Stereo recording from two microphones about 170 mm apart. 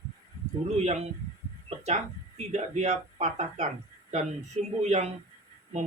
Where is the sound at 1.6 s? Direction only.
40° right (ahead or behind).